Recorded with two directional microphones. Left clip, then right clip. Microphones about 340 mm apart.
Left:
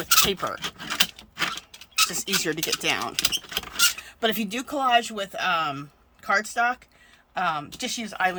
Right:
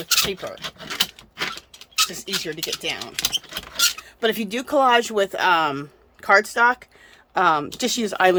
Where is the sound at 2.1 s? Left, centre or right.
Centre.